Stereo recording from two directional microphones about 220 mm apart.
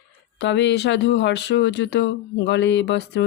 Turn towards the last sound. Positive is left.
turn(degrees=50)  # may be behind; listen again after turning